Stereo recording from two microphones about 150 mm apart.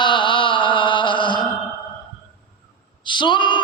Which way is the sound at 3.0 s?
30° left (ahead or behind).